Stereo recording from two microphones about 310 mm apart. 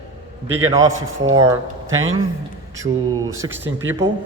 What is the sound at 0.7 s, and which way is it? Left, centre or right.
Speech, right.